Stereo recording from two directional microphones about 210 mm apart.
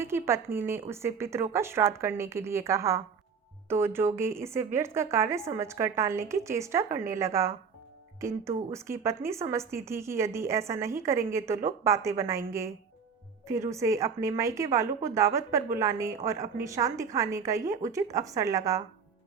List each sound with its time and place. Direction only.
0.0 s a woman's voice: 10° right (ahead or behind)